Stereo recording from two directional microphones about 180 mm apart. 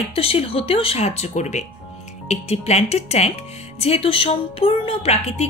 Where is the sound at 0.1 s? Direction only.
30° left (ahead or behind).